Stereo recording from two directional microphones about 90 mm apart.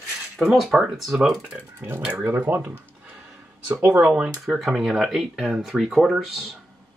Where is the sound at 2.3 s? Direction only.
25° right (ahead or behind).